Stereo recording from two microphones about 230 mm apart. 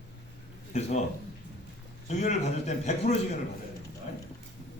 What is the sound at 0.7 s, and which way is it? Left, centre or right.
Speech, left.